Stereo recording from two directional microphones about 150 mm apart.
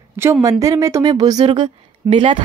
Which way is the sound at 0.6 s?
20° right (ahead or behind).